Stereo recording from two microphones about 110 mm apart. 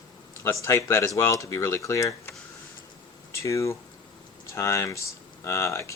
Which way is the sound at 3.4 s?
25° left (ahead or behind).